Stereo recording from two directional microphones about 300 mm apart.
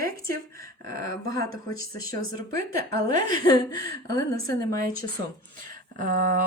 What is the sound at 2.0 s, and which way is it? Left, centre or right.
Speech, right.